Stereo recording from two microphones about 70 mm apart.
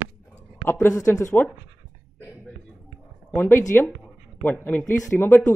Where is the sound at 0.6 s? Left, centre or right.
Left.